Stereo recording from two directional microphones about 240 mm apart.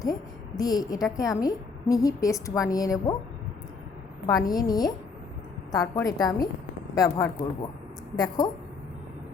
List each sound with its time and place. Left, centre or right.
0.0 s a sound: centre
1.1 s a woman's voice: centre
4.4 s a woman's voice: centre